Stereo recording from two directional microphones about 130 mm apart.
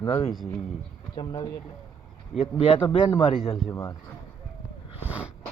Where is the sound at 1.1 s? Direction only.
35° left (ahead or behind).